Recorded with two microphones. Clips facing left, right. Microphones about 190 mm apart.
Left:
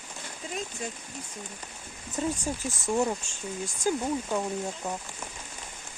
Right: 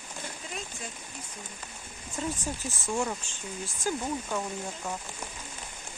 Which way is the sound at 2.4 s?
15° left (ahead or behind).